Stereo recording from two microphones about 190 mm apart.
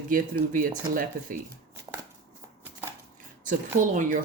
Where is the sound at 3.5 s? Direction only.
45° right (ahead or behind).